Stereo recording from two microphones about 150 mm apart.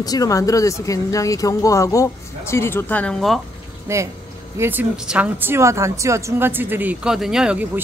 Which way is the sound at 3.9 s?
20° right (ahead or behind).